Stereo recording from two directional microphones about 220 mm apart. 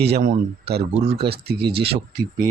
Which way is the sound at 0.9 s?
30° right (ahead or behind).